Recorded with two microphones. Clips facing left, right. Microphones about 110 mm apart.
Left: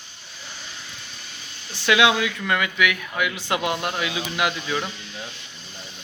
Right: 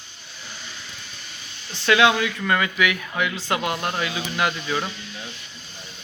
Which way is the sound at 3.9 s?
5° left (ahead or behind).